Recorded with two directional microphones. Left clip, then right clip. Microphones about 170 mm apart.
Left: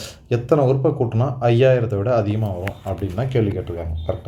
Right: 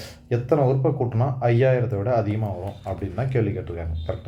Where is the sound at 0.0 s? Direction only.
35° left (ahead or behind).